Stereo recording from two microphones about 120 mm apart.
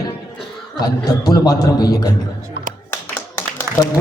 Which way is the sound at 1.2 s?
30° left (ahead or behind).